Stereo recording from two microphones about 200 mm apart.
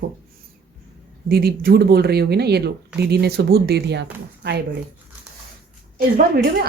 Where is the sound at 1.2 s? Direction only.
50° right (ahead or behind).